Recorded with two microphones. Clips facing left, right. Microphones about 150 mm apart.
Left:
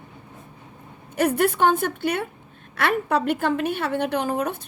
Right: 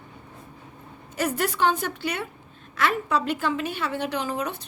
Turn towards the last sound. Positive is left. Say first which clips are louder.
# left 4 dB
turn(degrees=55)  # may be behind; listen again after turning